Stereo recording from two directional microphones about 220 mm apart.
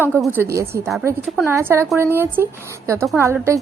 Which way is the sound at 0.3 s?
10° right (ahead or behind).